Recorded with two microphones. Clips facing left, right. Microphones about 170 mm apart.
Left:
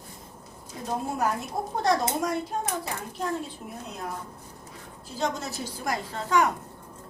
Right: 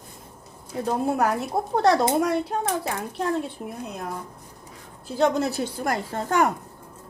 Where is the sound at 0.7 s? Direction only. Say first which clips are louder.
Right 7 dB; 65° right (ahead or behind).